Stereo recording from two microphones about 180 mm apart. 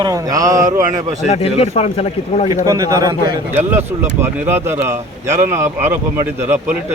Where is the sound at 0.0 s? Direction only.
20° right (ahead or behind).